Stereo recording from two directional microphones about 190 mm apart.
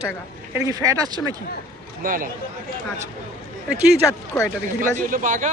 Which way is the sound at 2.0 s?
45° right (ahead or behind).